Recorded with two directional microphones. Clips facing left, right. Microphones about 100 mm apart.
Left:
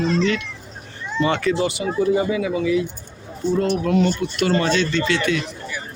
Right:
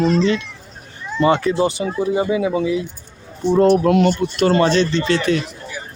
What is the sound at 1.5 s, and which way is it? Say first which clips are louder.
Speech: right 2 dB; 35° right (ahead or behind).